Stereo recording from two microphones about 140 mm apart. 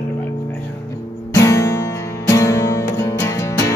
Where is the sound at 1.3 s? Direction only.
20° left (ahead or behind).